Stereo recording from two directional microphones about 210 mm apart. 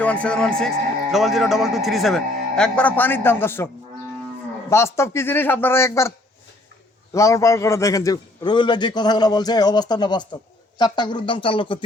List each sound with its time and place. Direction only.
0.0 s speech: 5° left (ahead or behind)
4.7 s a man's voice: 15° left (ahead or behind)